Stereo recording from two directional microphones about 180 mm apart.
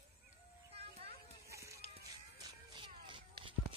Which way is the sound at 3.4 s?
30° right (ahead or behind).